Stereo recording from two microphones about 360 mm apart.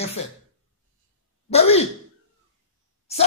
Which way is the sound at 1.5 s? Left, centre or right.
Centre.